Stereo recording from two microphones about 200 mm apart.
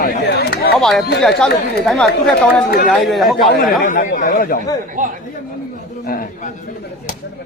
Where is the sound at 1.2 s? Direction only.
Centre (ahead or behind).